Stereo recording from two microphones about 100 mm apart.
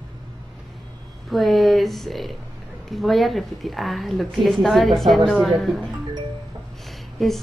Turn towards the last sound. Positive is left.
turn(degrees=0)  # may be behind; listen again after turning